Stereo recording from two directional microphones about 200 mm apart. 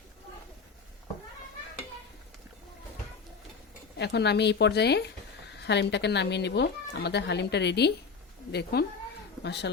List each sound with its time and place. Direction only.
3.9 s speech: 55° left (ahead or behind)